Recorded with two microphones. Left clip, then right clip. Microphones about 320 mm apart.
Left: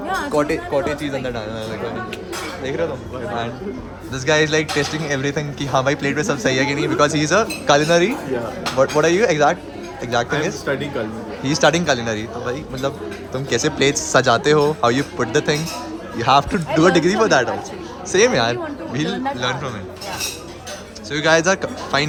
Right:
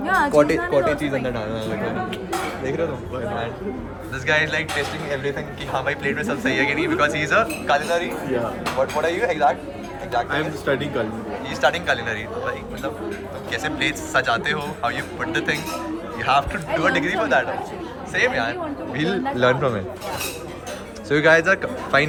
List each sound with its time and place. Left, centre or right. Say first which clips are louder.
0.1 s speech: right 3 dB; centre
4.3 s speech: left 4 dB; centre
10.2 s speech: left 1 dB; centre
11.4 s speech: left 4 dB; centre
19.4 s speech: right 5 dB; centre
21.1 s speech: even; centre